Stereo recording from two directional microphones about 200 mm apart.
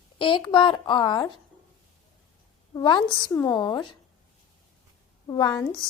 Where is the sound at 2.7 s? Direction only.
20° left (ahead or behind).